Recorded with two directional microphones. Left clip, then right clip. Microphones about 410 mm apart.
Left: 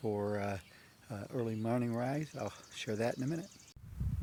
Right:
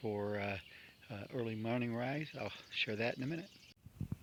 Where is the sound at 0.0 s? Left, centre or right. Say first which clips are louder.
Left 3 dB; right.